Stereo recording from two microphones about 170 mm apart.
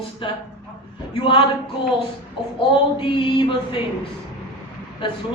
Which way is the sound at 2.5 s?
30° left (ahead or behind).